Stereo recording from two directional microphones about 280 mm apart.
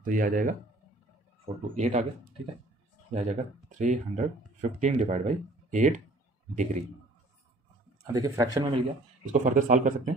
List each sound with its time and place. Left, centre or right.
0.0 s speech: right
3.1 s speech: right
8.1 s a man's voice: centre
9.3 s speech: right